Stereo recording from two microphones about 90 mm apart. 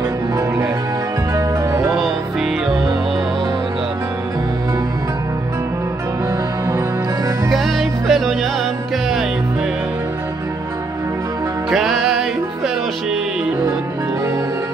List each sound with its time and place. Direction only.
1.3 s music: 35° right (ahead or behind)
7.4 s music: centre (ahead or behind)
11.7 s music: 5° right (ahead or behind)